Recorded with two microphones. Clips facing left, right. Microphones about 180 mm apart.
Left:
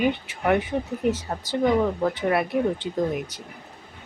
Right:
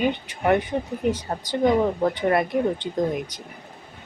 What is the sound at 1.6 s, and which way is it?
Speech, 20° right (ahead or behind).